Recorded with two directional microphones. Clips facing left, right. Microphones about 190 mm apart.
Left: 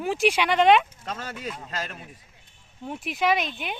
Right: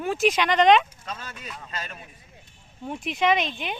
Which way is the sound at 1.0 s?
70° left (ahead or behind).